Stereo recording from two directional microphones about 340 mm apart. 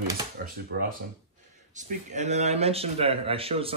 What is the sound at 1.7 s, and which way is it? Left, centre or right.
Speech, right.